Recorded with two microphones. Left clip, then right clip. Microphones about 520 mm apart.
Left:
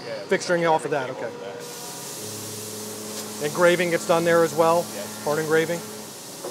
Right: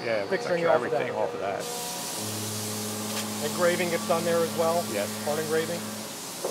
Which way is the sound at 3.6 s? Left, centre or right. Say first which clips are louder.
Left 6 dB; left.